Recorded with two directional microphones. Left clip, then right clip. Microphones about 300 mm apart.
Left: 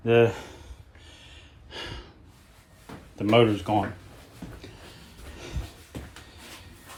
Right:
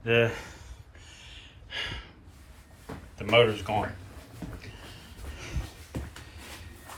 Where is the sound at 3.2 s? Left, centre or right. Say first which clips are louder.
Left 1 dB; left.